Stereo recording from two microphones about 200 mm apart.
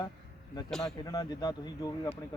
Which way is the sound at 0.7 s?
Centre (ahead or behind).